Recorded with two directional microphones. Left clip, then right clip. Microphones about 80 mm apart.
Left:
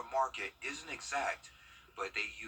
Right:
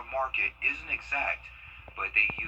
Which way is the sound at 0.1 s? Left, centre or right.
Left.